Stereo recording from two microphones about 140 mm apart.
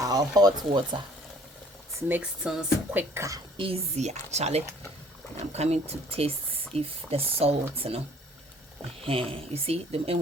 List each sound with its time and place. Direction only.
0.0 s speech: 25° right (ahead or behind)
2.0 s speech: 15° right (ahead or behind)
3.6 s speech: 45° right (ahead or behind)
9.0 s speech: 40° right (ahead or behind)